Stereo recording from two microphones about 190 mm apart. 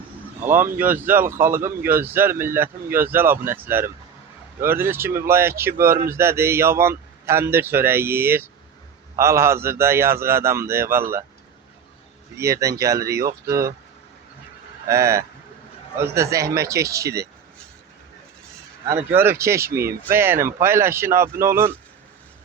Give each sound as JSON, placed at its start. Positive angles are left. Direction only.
{"t": 0.4, "sound": "speech", "side_deg": -10}
{"t": 12.4, "sound": "speech", "side_deg": -15}
{"t": 14.8, "sound": "speech", "side_deg": -15}
{"t": 18.9, "sound": "speech", "side_deg": -10}